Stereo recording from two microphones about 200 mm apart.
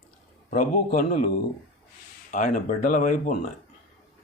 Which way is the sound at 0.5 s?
40° left (ahead or behind).